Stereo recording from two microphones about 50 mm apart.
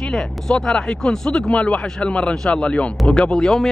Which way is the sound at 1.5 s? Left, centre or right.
Left.